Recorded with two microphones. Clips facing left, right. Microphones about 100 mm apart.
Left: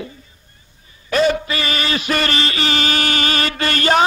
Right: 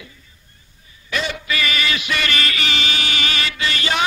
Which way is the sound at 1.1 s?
40° left (ahead or behind).